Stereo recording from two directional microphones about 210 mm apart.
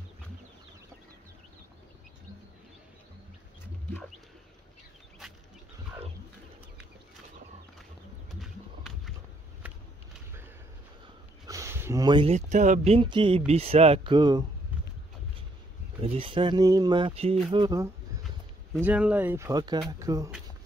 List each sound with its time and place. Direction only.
5.2 s a sound: centre (ahead or behind)
8.3 s horse: centre (ahead or behind)
11.4 s speech: 15° right (ahead or behind)
16.0 s speech: 25° right (ahead or behind)